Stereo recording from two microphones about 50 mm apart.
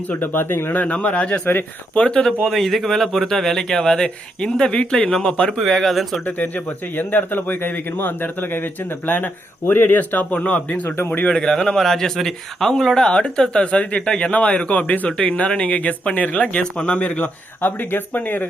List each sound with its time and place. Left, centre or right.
0.2 s speech: left
0.8 s speech: left
2.2 s speech: centre
5.5 s speech: centre
6.9 s speech: left
10.8 s speech: left
11.1 s speech: left
11.3 s speech: centre
17.6 s speech: left